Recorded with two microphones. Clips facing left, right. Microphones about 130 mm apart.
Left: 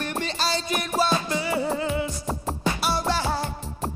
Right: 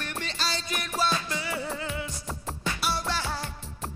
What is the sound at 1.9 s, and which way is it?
Music, 15° left (ahead or behind).